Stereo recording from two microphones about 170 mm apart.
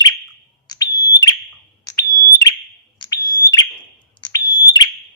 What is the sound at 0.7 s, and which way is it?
Smoke detector, 20° left (ahead or behind).